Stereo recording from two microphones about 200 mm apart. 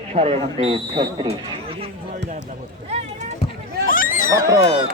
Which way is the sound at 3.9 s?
45° left (ahead or behind).